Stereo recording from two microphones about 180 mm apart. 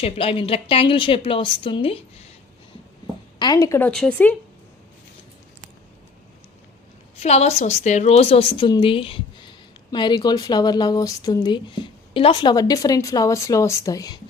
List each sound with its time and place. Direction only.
0.0 s a woman's voice: 30° left (ahead or behind)
3.3 s speech: 25° left (ahead or behind); by 4.4 s 5° left (ahead or behind)
7.2 s a woman's voice: 35° left (ahead or behind); by 14.2 s 20° left (ahead or behind)